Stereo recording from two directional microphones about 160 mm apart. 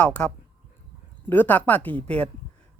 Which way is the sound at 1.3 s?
10° left (ahead or behind).